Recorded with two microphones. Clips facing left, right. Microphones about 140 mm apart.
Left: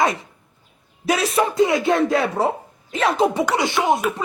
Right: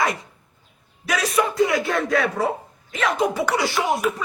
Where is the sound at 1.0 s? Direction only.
30° left (ahead or behind).